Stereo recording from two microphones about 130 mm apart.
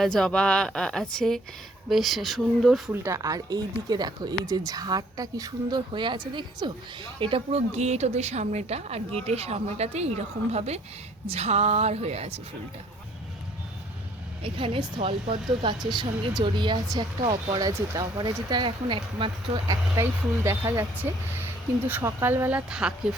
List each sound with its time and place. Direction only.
0.0 s speech: 5° left (ahead or behind)
2.9 s a woman's voice: 20° right (ahead or behind); by 12.4 s 55° right (ahead or behind)
14.4 s a woman's voice: 45° right (ahead or behind)
17.7 s a woman's voice: 25° right (ahead or behind)
20.0 s speech: 20° right (ahead or behind)
21.8 s speech: 15° right (ahead or behind)